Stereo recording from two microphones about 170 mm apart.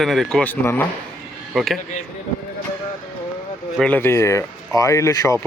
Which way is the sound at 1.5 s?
Centre (ahead or behind).